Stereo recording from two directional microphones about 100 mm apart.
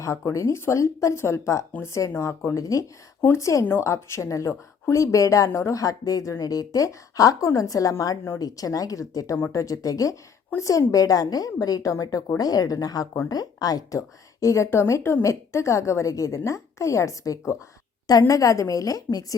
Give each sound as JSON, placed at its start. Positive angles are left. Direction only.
{"t": 0.0, "sound": "a woman's voice", "side_deg": 30}